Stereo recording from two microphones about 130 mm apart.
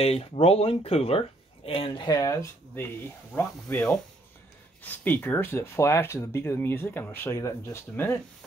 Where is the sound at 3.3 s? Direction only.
15° left (ahead or behind).